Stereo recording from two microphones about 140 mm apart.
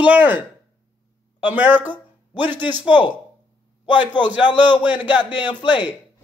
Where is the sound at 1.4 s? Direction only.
10° right (ahead or behind).